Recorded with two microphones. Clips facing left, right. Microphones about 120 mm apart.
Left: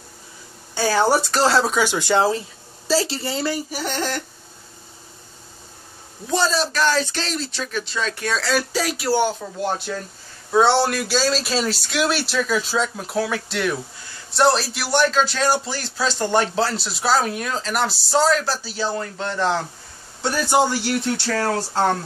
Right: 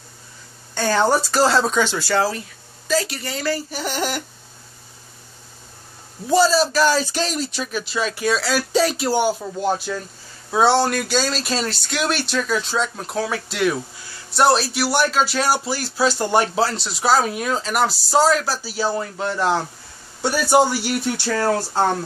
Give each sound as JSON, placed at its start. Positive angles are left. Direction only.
{"t": 0.7, "sound": "speech", "side_deg": 5}
{"t": 2.0, "sound": "a woman's voice", "side_deg": 20}
{"t": 3.7, "sound": "speech", "side_deg": -5}
{"t": 6.2, "sound": "speech", "side_deg": -5}
{"t": 8.7, "sound": "speech", "side_deg": -25}
{"t": 9.4, "sound": "speech", "side_deg": -10}